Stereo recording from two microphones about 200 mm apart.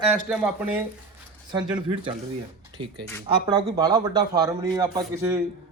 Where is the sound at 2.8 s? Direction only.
25° right (ahead or behind).